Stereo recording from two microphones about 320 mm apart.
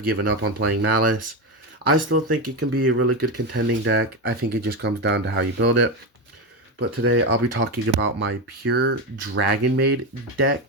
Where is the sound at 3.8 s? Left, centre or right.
Right.